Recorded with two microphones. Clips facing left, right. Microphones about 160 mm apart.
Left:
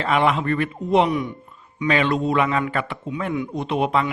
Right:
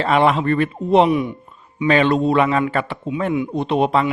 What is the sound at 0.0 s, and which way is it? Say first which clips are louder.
Speech: right 4 dB; 35° right (ahead or behind).